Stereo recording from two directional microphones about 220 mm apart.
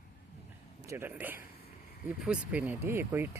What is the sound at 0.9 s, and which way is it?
Speech, 10° right (ahead or behind).